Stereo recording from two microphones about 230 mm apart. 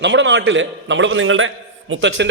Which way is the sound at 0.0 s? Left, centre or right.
Right.